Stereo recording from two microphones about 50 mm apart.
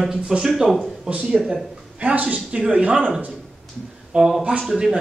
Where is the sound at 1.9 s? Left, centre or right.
Right.